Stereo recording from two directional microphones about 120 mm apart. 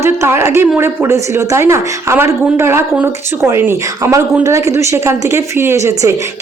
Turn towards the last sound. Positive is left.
turn(degrees=-25)  # may be behind; listen again after turning